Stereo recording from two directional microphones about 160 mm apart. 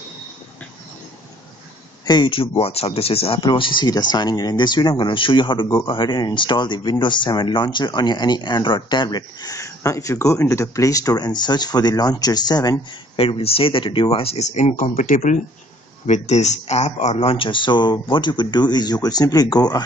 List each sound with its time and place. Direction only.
2.0 s speech: 30° left (ahead or behind)
2.6 s speech: 40° left (ahead or behind)
13.2 s speech: 35° left (ahead or behind)